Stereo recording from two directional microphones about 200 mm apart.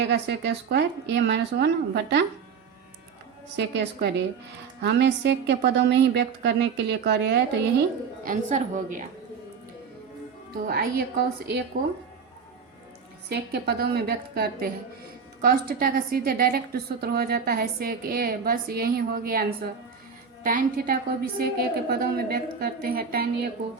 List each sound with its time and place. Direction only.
0.0 s a woman's voice: 55° right (ahead or behind)
3.5 s a woman's voice: 55° right (ahead or behind)
8.3 s a woman's voice: 40° right (ahead or behind)
10.7 s a woman's voice: 50° right (ahead or behind)
13.2 s a woman's voice: 55° right (ahead or behind)